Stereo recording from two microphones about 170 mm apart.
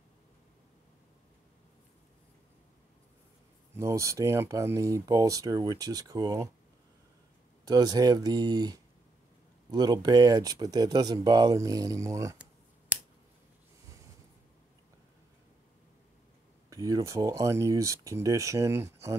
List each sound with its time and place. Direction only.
3.7 s speech: 15° right (ahead or behind)
7.6 s speech: 25° right (ahead or behind)
12.9 s finger snapping: 10° right (ahead or behind)
16.7 s speech: 20° right (ahead or behind)